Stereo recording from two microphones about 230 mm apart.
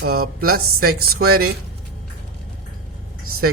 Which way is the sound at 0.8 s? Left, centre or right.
Right.